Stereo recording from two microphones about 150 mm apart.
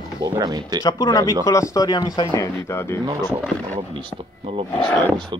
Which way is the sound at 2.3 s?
20° left (ahead or behind).